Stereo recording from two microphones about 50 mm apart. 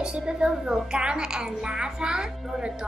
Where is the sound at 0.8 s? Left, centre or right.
Centre.